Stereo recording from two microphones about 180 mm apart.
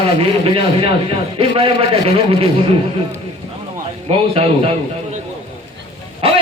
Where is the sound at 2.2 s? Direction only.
30° right (ahead or behind).